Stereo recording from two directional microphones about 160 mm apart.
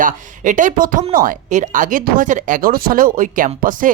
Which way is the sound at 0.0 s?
55° right (ahead or behind).